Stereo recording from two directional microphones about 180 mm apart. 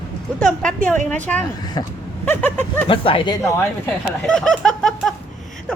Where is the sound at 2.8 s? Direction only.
30° left (ahead or behind).